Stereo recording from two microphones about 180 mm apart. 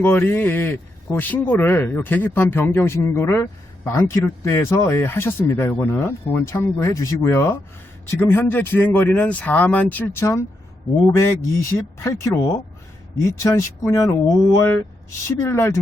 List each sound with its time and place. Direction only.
0.0 s a man's voice: 10° left (ahead or behind)